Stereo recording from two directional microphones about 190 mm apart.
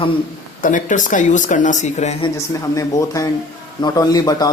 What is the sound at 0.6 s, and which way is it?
Speech, 40° left (ahead or behind).